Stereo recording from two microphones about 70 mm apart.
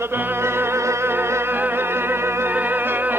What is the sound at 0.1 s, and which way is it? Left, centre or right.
Music, right.